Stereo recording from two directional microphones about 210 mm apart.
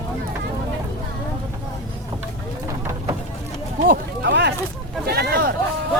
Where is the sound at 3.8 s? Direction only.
55° right (ahead or behind).